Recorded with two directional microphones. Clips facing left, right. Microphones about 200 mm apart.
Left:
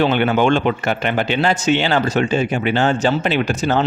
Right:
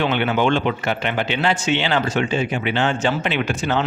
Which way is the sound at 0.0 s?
40° left (ahead or behind).